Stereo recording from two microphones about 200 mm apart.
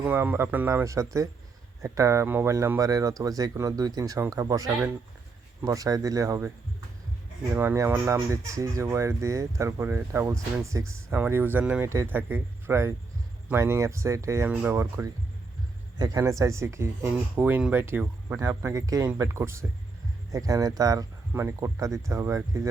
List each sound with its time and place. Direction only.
0.0 s speech: 10° right (ahead or behind)
7.5 s speech: 10° right (ahead or behind)